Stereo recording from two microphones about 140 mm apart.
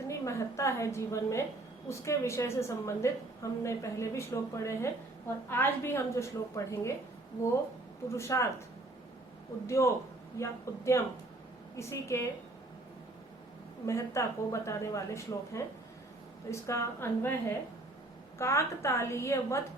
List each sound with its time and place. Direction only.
0.1 s a woman's voice: 20° left (ahead or behind)
8.1 s a woman's voice: 20° left (ahead or behind)
9.6 s a woman's voice: 20° left (ahead or behind)
13.8 s a woman's voice: 20° left (ahead or behind)
18.3 s a woman's voice: 20° left (ahead or behind)